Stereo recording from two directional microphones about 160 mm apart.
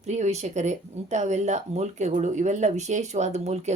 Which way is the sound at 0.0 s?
45° right (ahead or behind).